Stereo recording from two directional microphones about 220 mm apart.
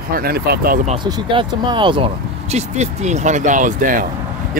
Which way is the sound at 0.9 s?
20° right (ahead or behind).